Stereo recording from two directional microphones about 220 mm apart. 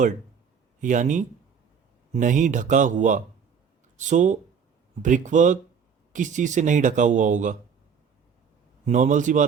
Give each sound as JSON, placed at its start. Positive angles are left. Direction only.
{"t": 0.8, "sound": "speech", "side_deg": -35}
{"t": 8.9, "sound": "speech", "side_deg": -35}